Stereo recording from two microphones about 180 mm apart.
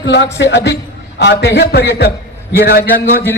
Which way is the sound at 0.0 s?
75° left (ahead or behind).